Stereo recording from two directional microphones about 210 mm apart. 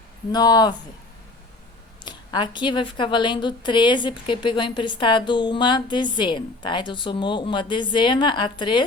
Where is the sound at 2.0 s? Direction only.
20° left (ahead or behind).